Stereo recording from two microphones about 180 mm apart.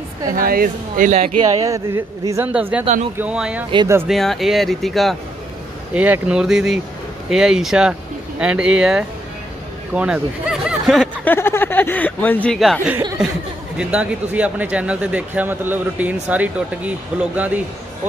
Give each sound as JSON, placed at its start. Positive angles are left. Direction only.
{"t": 0.3, "sound": "speech", "side_deg": -50}
{"t": 1.6, "sound": "speech", "side_deg": -15}
{"t": 2.8, "sound": "speech", "side_deg": -40}
{"t": 3.2, "sound": "speech", "side_deg": -5}
{"t": 3.7, "sound": "speech", "side_deg": -20}
{"t": 4.1, "sound": "speech", "side_deg": 0}
{"t": 11.2, "sound": "speech", "side_deg": 15}